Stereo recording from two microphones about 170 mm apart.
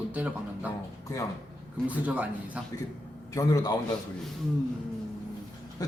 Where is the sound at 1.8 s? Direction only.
10° right (ahead or behind).